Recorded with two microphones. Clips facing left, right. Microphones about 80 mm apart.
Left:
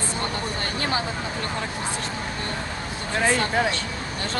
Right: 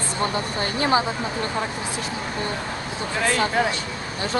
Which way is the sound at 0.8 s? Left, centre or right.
Right.